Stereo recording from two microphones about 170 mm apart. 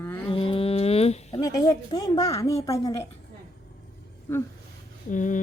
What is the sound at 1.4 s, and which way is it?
A woman's voice, 20° left (ahead or behind).